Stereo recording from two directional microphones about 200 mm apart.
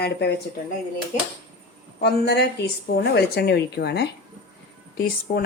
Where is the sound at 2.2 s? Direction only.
55° left (ahead or behind).